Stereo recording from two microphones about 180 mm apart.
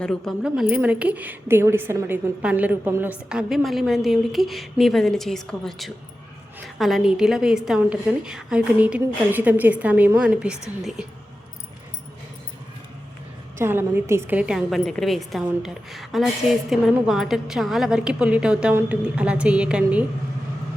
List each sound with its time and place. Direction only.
0.0 s a woman's voice: 5° left (ahead or behind)
13.6 s a woman's voice: 10° right (ahead or behind)